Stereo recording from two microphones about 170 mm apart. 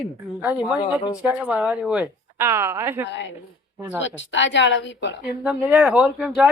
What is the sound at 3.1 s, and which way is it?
Speech, 90° left.